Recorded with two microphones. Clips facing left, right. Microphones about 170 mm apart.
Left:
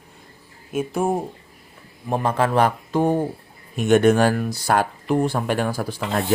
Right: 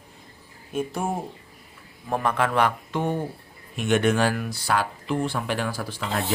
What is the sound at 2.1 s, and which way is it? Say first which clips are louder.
Speech: left 3 dB; 30° left (ahead or behind).